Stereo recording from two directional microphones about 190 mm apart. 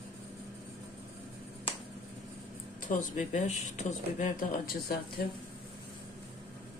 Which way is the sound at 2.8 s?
40° left (ahead or behind).